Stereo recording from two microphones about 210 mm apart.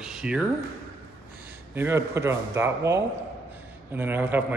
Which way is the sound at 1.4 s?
10° right (ahead or behind).